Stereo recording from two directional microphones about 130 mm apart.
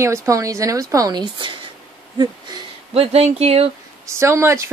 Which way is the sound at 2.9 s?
50° right (ahead or behind).